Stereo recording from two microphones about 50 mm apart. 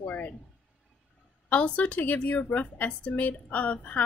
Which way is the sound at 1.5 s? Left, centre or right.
Left.